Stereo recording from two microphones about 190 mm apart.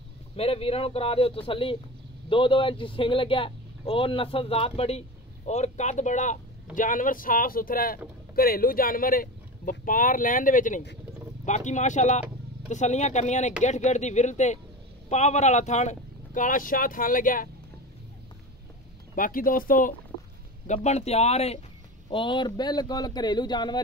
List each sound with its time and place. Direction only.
0.4 s speech: 30° left (ahead or behind); by 17.5 s 45° left (ahead or behind)
19.1 s a man's voice: 45° left (ahead or behind); by 23.8 s 20° left (ahead or behind)